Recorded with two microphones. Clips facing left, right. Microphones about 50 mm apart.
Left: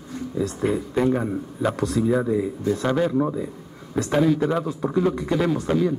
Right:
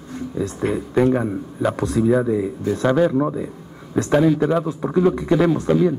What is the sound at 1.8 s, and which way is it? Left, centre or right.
Speech, right.